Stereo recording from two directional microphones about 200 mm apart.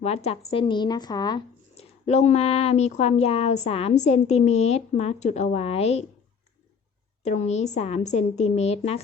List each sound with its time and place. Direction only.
0.0 s speech: 30° left (ahead or behind)
7.2 s speech: 35° left (ahead or behind)